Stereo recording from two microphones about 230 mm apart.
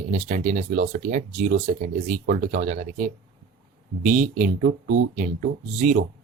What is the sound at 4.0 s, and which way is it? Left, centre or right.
Speech, right.